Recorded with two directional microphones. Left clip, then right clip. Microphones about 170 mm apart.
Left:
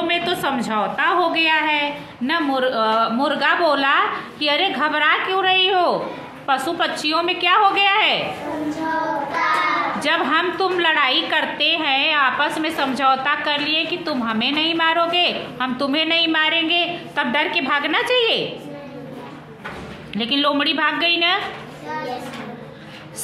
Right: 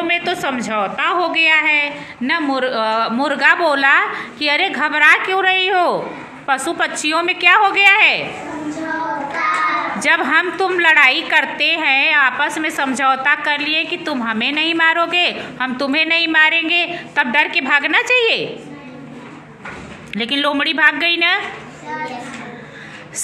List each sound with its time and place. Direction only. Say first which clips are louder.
0.0 s a woman's voice: right 2 dB; 10° right (ahead or behind)
2.2 s a woman's voice: right 2 dB; 35° right (ahead or behind)
9.9 s a woman's voice: right 4 dB; 30° right (ahead or behind)
20.2 s a woman's voice: right 2 dB; 25° right (ahead or behind)